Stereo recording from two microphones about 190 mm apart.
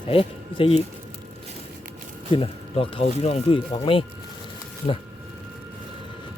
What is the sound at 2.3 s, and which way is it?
Speech, 30° left (ahead or behind).